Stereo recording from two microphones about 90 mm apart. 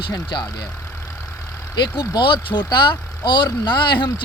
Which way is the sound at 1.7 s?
55° left (ahead or behind).